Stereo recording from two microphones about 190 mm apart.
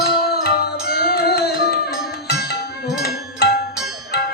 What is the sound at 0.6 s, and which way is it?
Music, 55° left (ahead or behind).